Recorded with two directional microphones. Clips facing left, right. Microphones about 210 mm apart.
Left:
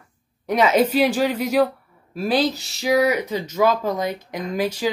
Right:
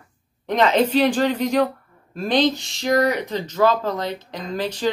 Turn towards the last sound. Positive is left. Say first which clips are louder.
# left 3 dB
turn(degrees=10)  # may be behind; listen again after turning